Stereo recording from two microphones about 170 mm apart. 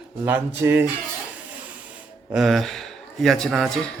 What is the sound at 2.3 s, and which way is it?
A man's voice, centre (ahead or behind).